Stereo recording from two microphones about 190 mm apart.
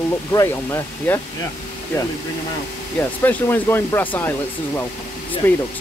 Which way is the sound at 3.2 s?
10° left (ahead or behind).